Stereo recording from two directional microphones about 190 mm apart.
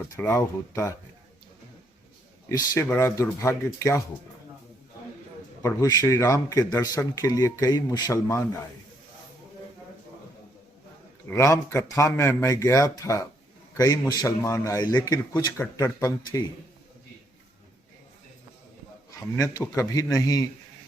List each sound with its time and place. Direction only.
0.2 s a man's voice: 15° left (ahead or behind)
2.5 s a man's voice: 15° left (ahead or behind)
5.6 s speech: 20° left (ahead or behind)
11.3 s a man's voice: 15° left (ahead or behind)
19.4 s a man's voice: 15° left (ahead or behind)